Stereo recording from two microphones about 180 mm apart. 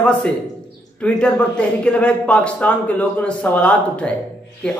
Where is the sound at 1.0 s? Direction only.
5° left (ahead or behind).